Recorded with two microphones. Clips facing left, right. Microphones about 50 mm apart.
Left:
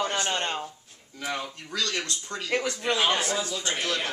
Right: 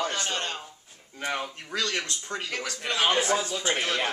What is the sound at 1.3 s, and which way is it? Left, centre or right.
Speech, right.